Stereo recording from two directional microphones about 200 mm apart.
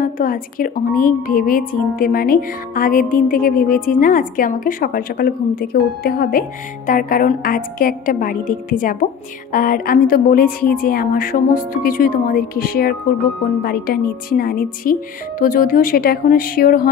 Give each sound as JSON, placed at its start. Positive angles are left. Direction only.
{"t": 0.0, "sound": "a woman's voice", "side_deg": 45}